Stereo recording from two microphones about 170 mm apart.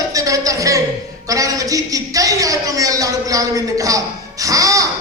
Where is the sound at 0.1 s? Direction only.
20° right (ahead or behind).